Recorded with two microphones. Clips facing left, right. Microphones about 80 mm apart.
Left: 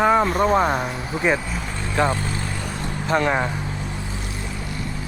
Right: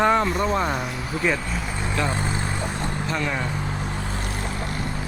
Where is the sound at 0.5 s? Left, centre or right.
Left.